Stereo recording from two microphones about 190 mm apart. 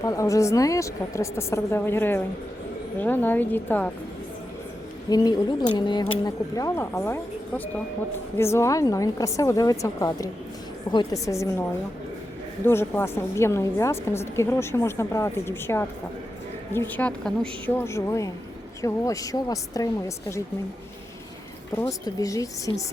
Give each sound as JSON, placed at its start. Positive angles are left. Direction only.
{"t": 0.0, "sound": "a woman's voice", "side_deg": 15}
{"t": 5.0, "sound": "a woman's voice", "side_deg": 20}
{"t": 12.6, "sound": "a woman's voice", "side_deg": 10}
{"t": 21.8, "sound": "a woman's voice", "side_deg": 15}